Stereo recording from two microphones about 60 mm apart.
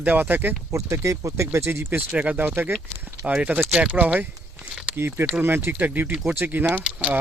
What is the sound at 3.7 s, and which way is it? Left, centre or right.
Speech, right.